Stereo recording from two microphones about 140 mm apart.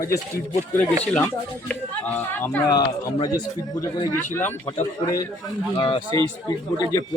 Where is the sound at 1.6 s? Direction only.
10° left (ahead or behind).